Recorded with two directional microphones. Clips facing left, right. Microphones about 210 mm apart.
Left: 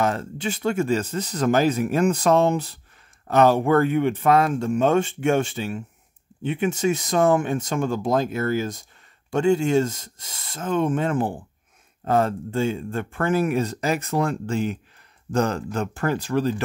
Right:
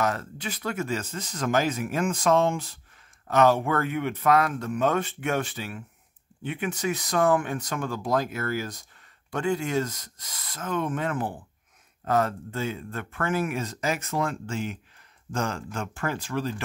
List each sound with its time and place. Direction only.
0.0 s speech: 25° left (ahead or behind)